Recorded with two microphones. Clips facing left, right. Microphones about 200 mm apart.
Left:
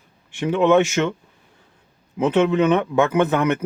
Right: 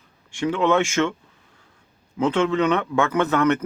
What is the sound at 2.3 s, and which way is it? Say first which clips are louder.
Speech: left 4 dB; 15° left (ahead or behind).